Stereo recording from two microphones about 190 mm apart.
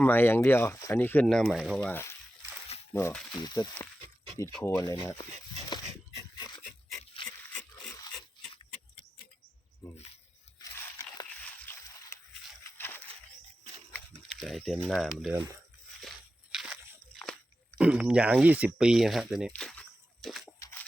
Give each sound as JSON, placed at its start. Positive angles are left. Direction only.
{"t": 0.0, "sound": "speech", "side_deg": 10}
{"t": 1.8, "sound": "speech", "side_deg": 10}
{"t": 3.3, "sound": "speech", "side_deg": 20}
{"t": 7.4, "sound": "dog", "side_deg": 15}
{"t": 10.6, "sound": "biting", "side_deg": 15}
{"t": 11.4, "sound": "a sound", "side_deg": 10}
{"t": 13.9, "sound": "speech", "side_deg": 5}
{"t": 16.0, "sound": "crunch", "side_deg": 0}
{"t": 17.2, "sound": "biting", "side_deg": 5}
{"t": 17.7, "sound": "speech", "side_deg": -5}
{"t": 20.2, "sound": "a sound", "side_deg": 0}
{"t": 20.6, "sound": "a sound", "side_deg": 15}